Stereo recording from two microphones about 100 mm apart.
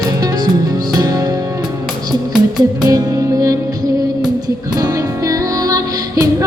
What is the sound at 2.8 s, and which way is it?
Music, 35° right (ahead or behind).